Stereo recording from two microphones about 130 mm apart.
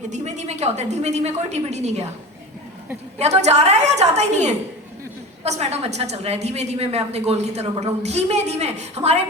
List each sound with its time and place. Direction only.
0.1 s a woman's voice: 60° right (ahead or behind)
3.2 s a woman's voice: 55° right (ahead or behind)